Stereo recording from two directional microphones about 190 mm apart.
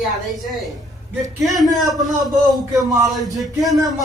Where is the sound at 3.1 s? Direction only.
Centre (ahead or behind).